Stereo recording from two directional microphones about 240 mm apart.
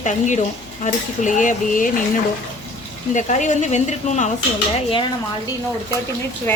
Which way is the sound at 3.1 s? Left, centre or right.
Left.